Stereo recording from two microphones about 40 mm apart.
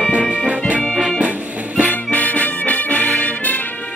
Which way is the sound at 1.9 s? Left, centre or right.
Left.